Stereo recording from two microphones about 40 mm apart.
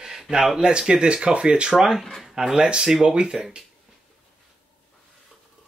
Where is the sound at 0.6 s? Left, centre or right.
Right.